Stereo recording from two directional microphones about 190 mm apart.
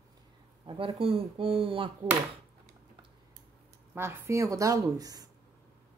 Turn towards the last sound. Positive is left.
turn(degrees=-20)  # may be behind; listen again after turning